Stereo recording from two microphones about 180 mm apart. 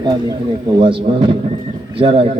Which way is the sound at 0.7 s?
30° right (ahead or behind).